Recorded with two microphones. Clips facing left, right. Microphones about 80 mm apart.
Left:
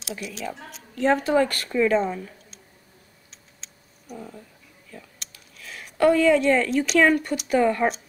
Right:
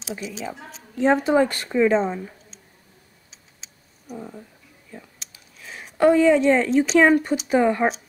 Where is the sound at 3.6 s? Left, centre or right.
Centre.